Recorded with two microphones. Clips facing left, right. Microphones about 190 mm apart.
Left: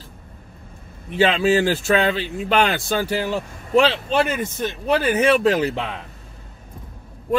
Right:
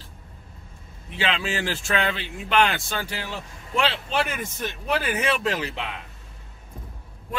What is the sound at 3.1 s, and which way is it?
Speech, 50° left (ahead or behind).